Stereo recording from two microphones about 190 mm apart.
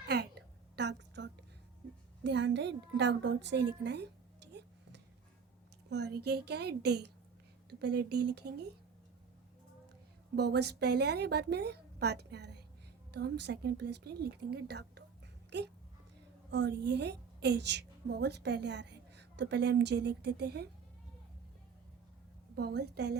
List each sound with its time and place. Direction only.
0.1 s a sound: 60° right (ahead or behind)
2.2 s a woman's voice: 65° right (ahead or behind)
5.9 s a woman's voice: 60° right (ahead or behind)
10.3 s a woman's voice: 60° right (ahead or behind)
22.5 s a woman's voice: 60° right (ahead or behind)